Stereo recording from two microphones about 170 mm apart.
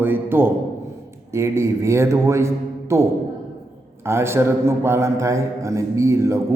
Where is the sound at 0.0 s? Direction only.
10° right (ahead or behind).